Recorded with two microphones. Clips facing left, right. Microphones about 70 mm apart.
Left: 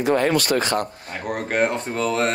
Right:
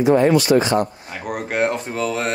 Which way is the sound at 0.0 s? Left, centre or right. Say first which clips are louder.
Right 5 dB; left.